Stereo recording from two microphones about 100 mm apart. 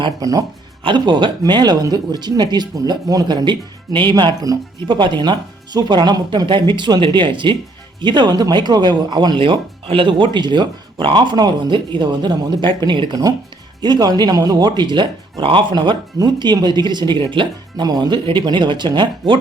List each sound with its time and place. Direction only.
0.2 s speech: 40° right (ahead or behind)
0.9 s speech: 50° right (ahead or behind)
18.3 s speech: 55° right (ahead or behind)